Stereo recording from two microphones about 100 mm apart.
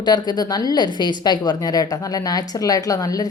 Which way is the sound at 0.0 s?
45° left (ahead or behind).